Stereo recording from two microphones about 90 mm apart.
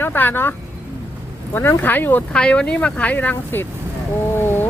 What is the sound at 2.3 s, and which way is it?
Speech, 10° left (ahead or behind).